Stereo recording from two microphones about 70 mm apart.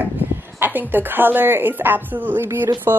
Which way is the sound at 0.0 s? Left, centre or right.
Right.